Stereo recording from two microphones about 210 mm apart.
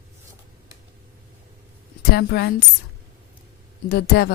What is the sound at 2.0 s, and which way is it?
Speech, 50° left (ahead or behind).